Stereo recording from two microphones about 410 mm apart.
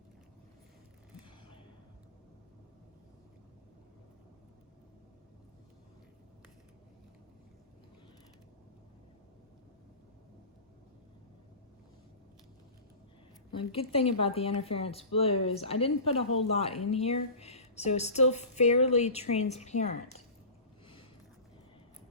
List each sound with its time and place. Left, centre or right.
13.7 s speech: centre